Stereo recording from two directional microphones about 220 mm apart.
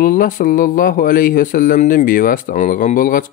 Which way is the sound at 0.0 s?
40° left (ahead or behind).